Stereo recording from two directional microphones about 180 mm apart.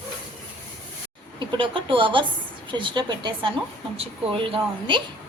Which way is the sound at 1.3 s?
25° right (ahead or behind).